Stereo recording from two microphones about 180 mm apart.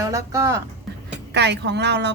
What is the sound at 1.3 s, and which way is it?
Speech, 70° right (ahead or behind).